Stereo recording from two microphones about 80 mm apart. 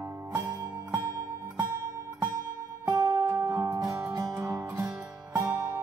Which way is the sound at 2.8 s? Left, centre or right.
Right.